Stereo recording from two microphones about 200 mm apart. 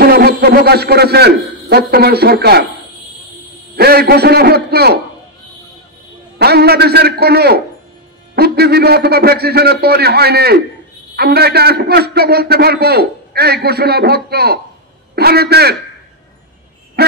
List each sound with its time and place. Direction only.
0.0 s a man's voice: 50° right (ahead or behind)
3.7 s a man's voice: 50° right (ahead or behind)
6.3 s a man's voice: 50° right (ahead or behind)